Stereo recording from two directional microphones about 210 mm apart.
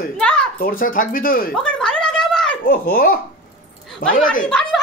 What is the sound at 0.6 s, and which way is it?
Speech, 45° left (ahead or behind).